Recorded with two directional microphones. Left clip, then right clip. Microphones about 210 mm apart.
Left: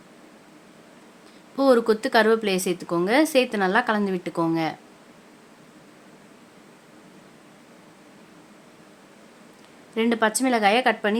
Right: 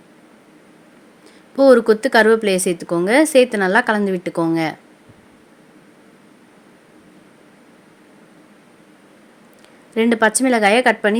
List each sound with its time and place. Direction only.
1.5 s a woman's voice: 15° right (ahead or behind)
9.9 s a woman's voice: 20° right (ahead or behind)